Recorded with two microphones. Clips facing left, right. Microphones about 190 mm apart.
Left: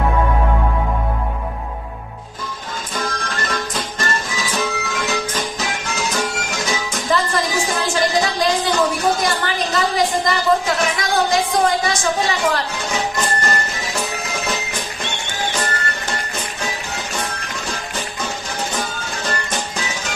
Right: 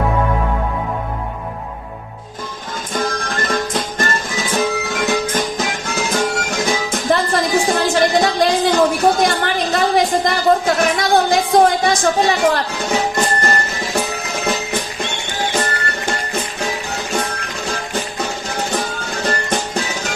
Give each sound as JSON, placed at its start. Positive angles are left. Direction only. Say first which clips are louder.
{"t": 2.9, "sound": "music", "louder": "right 5 dB", "side_deg": -50}
{"t": 10.8, "sound": "a sound", "louder": "right 4 dB", "side_deg": -55}
{"t": 12.9, "sound": "music", "louder": "right 5 dB", "side_deg": -60}
{"t": 19.2, "sound": "music", "louder": "right 5 dB", "side_deg": -60}